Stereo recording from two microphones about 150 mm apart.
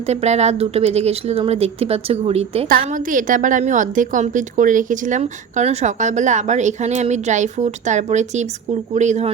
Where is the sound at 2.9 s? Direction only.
60° right (ahead or behind).